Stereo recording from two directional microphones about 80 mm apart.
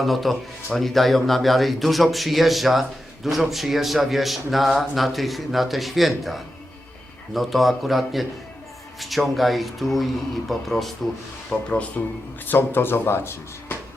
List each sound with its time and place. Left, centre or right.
0.0 s speech: centre
11.4 s speech: centre
12.5 s speech: left